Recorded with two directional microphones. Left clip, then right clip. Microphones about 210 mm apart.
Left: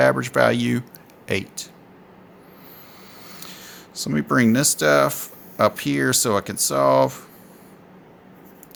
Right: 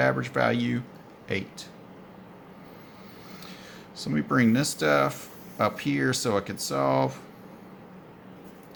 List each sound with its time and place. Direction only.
0.0 s speech: 55° left (ahead or behind)
3.4 s speech: 55° left (ahead or behind)